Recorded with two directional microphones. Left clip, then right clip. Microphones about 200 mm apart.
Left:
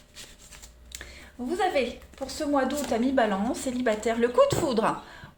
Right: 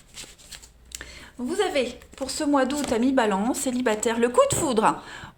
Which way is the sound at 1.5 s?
35° right (ahead or behind).